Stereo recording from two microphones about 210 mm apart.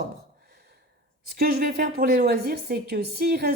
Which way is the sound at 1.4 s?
45° right (ahead or behind).